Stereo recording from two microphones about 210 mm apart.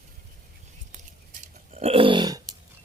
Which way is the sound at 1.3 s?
30° right (ahead or behind).